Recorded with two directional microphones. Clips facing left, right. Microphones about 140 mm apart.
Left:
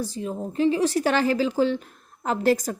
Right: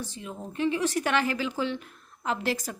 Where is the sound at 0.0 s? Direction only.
35° left (ahead or behind).